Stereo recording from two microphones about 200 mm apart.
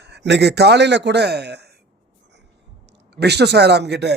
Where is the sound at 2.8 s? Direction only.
55° right (ahead or behind).